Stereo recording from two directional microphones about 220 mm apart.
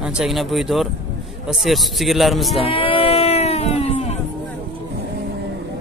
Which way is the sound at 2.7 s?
25° left (ahead or behind).